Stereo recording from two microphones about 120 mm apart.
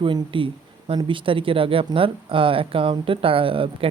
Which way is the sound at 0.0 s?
45° right (ahead or behind).